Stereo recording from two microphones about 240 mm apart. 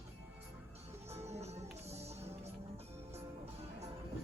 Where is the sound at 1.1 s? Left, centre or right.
Right.